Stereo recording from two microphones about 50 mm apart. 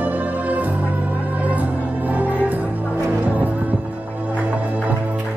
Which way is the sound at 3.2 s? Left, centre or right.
Right.